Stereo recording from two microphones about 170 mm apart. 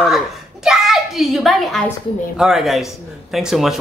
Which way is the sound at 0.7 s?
5° right (ahead or behind).